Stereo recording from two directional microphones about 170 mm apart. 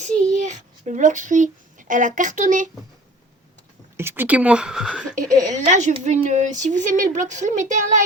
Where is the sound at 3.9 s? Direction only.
15° right (ahead or behind).